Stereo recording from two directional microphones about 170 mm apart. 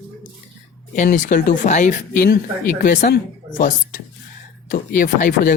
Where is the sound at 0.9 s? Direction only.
45° left (ahead or behind).